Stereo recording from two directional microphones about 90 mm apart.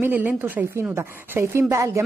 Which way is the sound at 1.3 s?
30° right (ahead or behind).